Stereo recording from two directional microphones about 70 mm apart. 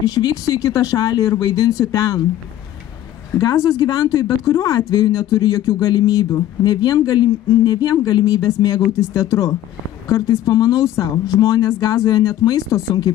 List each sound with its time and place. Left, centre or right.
0.0 s speech: left
3.3 s speech: left